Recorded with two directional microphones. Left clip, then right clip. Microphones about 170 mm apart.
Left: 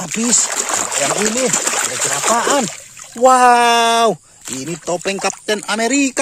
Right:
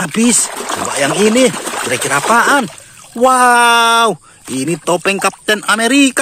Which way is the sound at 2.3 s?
5° right (ahead or behind).